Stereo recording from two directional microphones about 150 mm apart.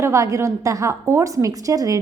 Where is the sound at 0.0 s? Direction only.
20° right (ahead or behind).